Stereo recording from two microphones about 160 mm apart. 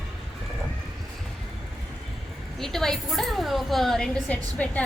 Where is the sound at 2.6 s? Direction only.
Centre (ahead or behind).